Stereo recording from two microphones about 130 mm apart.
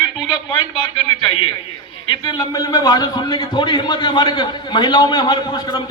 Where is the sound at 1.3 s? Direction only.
35° left (ahead or behind).